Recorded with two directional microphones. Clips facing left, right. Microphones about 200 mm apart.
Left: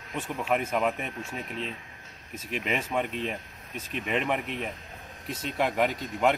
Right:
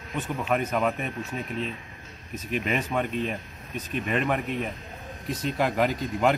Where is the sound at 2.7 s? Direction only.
10° left (ahead or behind).